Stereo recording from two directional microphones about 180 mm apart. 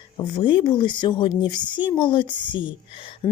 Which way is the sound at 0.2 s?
25° left (ahead or behind).